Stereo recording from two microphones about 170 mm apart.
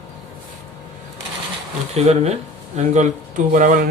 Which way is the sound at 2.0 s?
40° right (ahead or behind).